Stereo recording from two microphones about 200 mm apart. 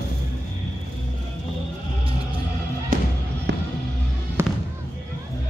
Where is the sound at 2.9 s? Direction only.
40° right (ahead or behind).